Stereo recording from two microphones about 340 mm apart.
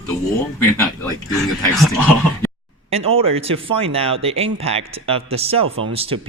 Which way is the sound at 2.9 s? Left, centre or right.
Centre.